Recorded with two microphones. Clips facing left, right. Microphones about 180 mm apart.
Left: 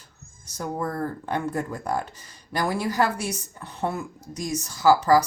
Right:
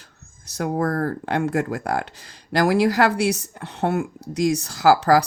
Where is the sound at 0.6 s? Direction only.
70° right (ahead or behind).